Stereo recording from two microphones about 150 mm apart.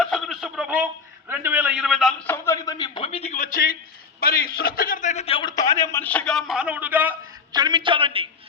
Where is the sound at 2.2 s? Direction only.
15° left (ahead or behind); by 3.8 s 70° left (ahead or behind).